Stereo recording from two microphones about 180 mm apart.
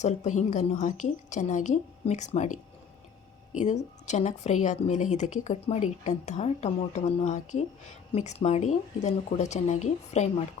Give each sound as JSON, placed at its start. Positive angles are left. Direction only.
{"t": 0.0, "sound": "a woman's voice", "side_deg": 40}
{"t": 3.6, "sound": "a woman's voice", "side_deg": 40}